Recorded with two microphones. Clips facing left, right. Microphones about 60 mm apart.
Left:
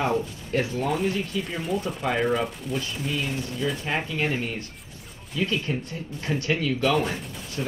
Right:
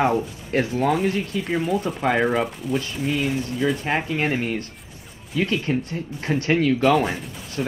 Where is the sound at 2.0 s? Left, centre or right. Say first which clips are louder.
Right 6 dB; right.